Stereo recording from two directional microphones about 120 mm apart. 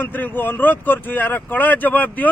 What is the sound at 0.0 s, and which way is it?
Speech, 15° left (ahead or behind).